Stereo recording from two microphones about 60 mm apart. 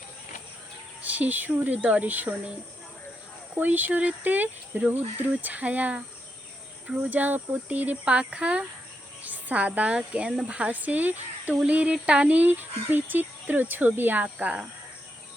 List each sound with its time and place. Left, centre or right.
1.0 s speech: right
3.5 s speech: right